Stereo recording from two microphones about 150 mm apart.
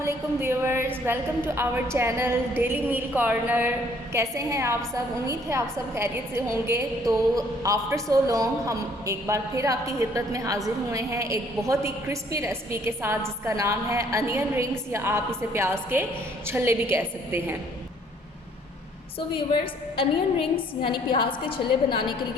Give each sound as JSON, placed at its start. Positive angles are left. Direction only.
{"t": 0.0, "sound": "a woman's voice", "side_deg": -15}
{"t": 20.0, "sound": "a woman's voice", "side_deg": 35}